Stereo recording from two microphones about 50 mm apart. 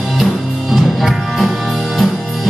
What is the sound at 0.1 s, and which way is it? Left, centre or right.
Music, centre.